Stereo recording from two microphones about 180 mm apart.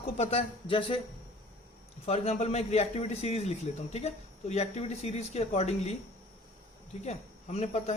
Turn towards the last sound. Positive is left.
turn(degrees=35)  # may be behind; listen again after turning